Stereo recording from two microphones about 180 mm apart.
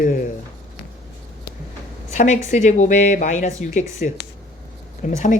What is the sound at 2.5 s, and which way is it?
Speech, 40° left (ahead or behind).